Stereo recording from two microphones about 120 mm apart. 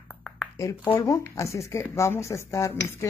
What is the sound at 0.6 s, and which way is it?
Speech, 25° left (ahead or behind).